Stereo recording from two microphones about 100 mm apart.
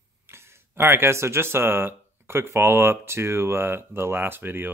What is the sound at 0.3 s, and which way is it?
Speech, 25° right (ahead or behind).